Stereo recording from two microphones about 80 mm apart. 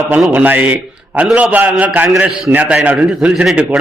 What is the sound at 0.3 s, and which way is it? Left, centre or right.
A man's voice, right.